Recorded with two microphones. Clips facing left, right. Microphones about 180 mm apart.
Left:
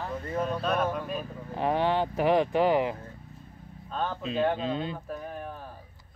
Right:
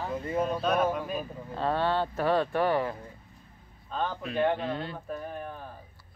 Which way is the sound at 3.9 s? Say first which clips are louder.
Even; centre (ahead or behind).